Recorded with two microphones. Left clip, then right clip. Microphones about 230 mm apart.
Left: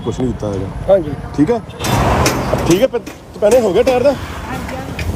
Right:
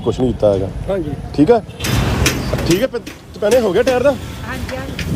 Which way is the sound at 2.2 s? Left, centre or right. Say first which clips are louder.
Left 3 dB; centre.